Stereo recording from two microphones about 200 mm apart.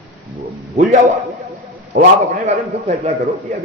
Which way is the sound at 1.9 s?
45° right (ahead or behind).